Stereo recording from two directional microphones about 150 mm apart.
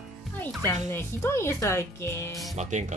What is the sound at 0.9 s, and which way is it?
Speech, 15° left (ahead or behind).